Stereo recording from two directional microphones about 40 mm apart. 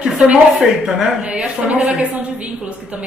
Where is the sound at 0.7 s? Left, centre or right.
Centre.